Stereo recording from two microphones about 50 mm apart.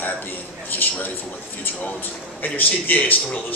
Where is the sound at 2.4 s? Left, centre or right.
Left.